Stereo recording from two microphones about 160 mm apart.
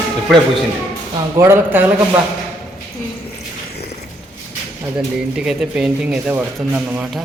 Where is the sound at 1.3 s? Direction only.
15° right (ahead or behind).